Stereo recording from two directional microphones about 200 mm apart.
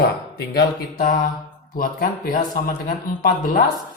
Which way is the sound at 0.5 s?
45° left (ahead or behind).